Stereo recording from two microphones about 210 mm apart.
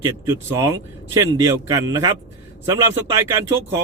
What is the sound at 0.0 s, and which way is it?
Speech, 15° right (ahead or behind).